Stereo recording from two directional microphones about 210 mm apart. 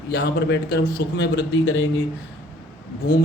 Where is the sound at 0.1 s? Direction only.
55° left (ahead or behind).